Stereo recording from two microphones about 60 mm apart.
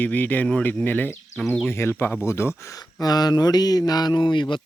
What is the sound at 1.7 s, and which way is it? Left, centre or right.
Speech, left.